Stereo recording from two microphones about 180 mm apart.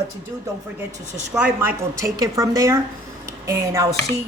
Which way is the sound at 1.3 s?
10° right (ahead or behind).